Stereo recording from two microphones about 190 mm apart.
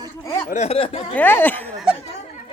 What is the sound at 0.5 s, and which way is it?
Speech, 35° left (ahead or behind).